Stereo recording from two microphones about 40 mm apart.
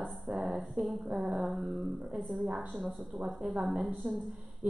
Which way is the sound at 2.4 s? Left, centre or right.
Right.